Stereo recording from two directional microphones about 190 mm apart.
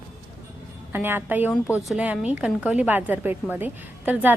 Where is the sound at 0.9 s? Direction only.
10° right (ahead or behind).